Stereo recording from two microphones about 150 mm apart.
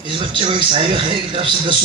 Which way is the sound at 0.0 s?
35° right (ahead or behind).